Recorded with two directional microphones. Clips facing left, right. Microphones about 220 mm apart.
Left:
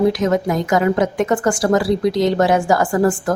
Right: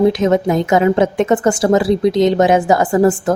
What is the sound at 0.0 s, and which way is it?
A woman's voice, 25° right (ahead or behind).